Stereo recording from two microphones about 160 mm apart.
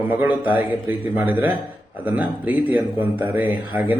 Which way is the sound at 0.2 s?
10° right (ahead or behind).